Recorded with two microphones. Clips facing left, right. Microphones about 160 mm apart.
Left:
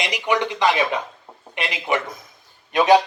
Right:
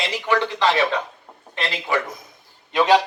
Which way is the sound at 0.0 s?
15° left (ahead or behind).